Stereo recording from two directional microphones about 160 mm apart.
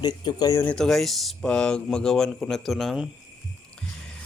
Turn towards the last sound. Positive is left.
turn(degrees=0)  # may be behind; listen again after turning